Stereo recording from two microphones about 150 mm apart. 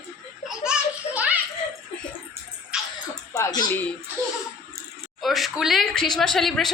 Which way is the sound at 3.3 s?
25° left (ahead or behind).